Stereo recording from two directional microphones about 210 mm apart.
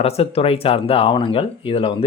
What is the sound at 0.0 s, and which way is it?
Speech, 30° left (ahead or behind).